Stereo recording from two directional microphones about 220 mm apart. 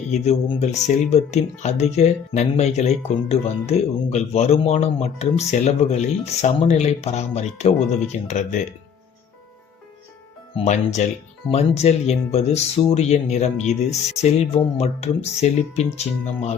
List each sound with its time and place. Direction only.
0.1 s speech: 30° left (ahead or behind)
10.5 s speech: 30° left (ahead or behind)